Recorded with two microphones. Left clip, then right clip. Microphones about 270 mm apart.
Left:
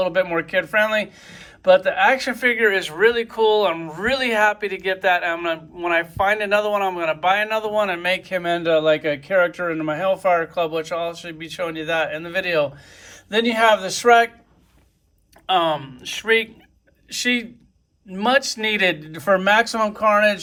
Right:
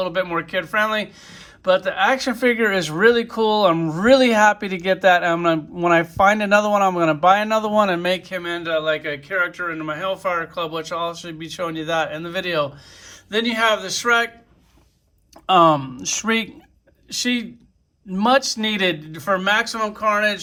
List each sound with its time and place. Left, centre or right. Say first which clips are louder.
0.0 s speech: left 2 dB; centre
15.4 s speech: right 5 dB; centre